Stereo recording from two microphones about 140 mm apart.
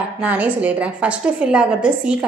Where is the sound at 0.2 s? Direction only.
10° right (ahead or behind).